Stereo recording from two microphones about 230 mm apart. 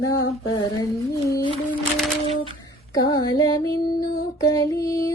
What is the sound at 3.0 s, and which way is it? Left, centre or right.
Female singing, centre.